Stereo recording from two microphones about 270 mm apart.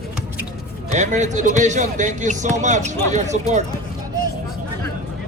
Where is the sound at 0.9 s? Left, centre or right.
Right.